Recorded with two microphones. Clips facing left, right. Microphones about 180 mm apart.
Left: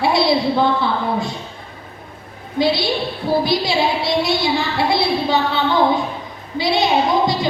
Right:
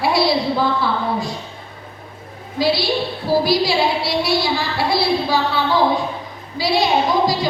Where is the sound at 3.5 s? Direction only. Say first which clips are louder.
Right 1 dB; 20° left (ahead or behind).